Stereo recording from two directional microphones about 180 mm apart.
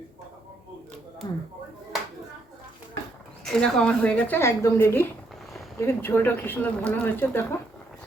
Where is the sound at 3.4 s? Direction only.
5° left (ahead or behind).